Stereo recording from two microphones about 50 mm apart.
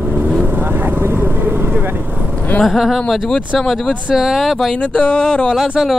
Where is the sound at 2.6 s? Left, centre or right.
Centre.